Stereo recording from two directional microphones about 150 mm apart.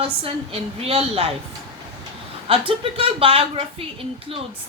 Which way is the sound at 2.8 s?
40° right (ahead or behind).